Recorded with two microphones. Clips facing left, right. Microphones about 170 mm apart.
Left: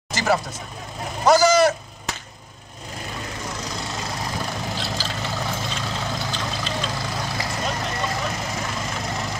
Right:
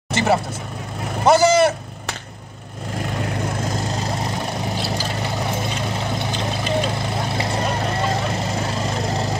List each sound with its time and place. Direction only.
0.1 s vehicle: 25° right (ahead or behind)
3.2 s vehicle: 55° right (ahead or behind)
4.9 s vehicle: 15° right (ahead or behind); by 9.4 s 30° right (ahead or behind)